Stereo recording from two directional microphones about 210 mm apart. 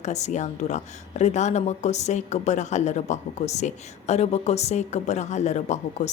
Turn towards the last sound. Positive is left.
turn(degrees=35)  # may be behind; listen again after turning